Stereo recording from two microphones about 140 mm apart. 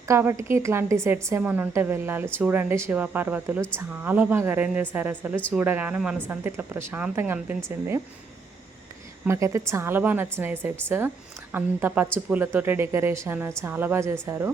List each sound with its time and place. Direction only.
0.0 s a woman's voice: 20° right (ahead or behind)
9.2 s a woman's voice: 20° right (ahead or behind)